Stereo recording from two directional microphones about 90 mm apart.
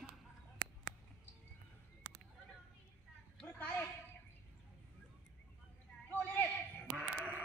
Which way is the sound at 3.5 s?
20° left (ahead or behind).